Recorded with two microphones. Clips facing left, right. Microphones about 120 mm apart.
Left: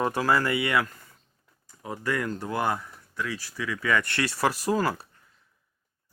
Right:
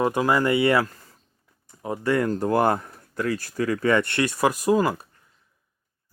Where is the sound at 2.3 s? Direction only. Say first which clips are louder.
Right 7 dB; 45° right (ahead or behind).